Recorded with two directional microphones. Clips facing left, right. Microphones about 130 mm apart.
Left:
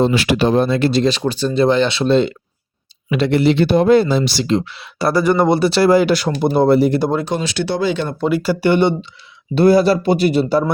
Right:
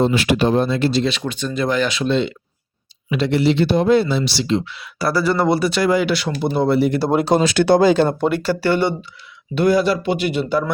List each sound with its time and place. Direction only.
0.0 s speech: 90° left; by 1.0 s 55° left (ahead or behind)
1.0 s speech: 35° left (ahead or behind)
3.1 s speech: 55° left (ahead or behind)
4.8 s speech: 25° left (ahead or behind); by 7.0 s 40° left (ahead or behind)
7.4 s speech: 50° right (ahead or behind)
8.2 s speech: 5° left (ahead or behind)
8.6 s speech: 20° left (ahead or behind)
9.6 s speech: 35° left (ahead or behind)